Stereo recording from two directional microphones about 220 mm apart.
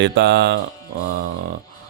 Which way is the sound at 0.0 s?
55° right (ahead or behind).